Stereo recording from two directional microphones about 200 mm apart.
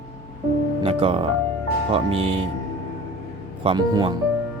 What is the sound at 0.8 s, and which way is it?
Speech, 30° right (ahead or behind).